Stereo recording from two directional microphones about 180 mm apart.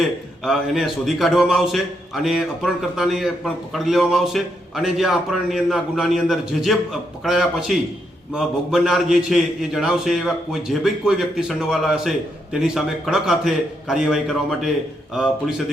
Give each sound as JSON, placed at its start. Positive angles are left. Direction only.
{"t": 0.4, "sound": "a man's voice", "side_deg": 0}